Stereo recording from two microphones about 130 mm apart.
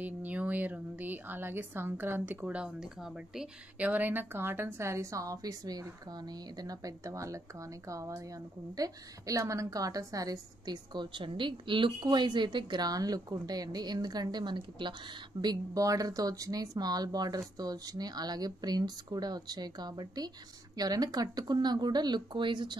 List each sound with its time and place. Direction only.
0.0 s a woman's voice: 10° right (ahead or behind); by 22.8 s 35° right (ahead or behind)